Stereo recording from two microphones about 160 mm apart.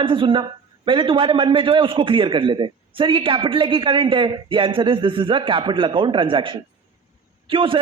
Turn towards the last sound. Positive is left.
turn(degrees=-35)  # may be behind; listen again after turning